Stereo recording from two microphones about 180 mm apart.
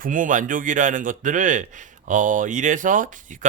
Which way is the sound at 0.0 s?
45° right (ahead or behind).